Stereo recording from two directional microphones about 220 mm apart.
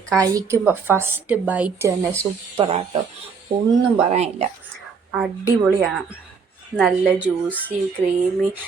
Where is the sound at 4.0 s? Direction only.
30° right (ahead or behind).